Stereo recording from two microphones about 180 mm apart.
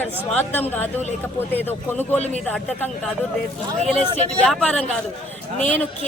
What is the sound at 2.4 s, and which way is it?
Speech, 5° left (ahead or behind).